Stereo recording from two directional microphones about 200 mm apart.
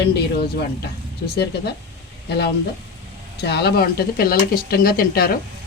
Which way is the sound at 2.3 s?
55° left (ahead or behind).